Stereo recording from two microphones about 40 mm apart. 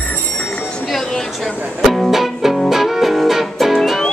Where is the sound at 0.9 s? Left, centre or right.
Centre.